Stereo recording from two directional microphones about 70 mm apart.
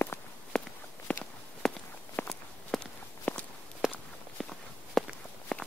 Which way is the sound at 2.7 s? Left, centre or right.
Centre.